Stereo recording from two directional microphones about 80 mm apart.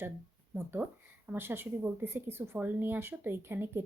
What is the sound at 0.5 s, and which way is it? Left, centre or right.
Speech, right.